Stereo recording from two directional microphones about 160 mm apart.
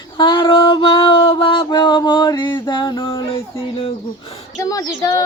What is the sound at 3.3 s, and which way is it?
Music, 35° left (ahead or behind).